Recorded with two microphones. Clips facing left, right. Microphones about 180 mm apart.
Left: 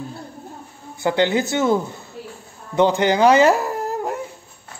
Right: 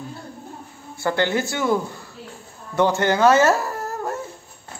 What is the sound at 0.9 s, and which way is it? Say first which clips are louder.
Speech: left 3 dB; 20° left (ahead or behind).